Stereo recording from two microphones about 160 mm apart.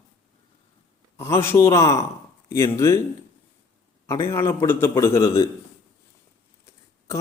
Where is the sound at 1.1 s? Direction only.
15° left (ahead or behind).